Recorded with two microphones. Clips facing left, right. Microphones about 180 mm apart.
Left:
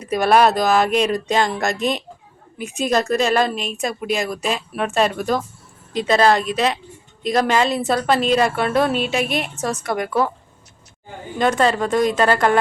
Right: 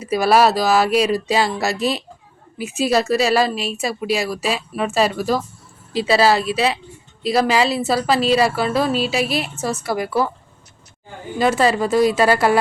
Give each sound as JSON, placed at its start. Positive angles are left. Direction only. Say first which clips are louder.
{"t": 0.0, "sound": "speech", "louder": "even", "side_deg": -5}
{"t": 11.3, "sound": "speech", "louder": "right 1 dB", "side_deg": -5}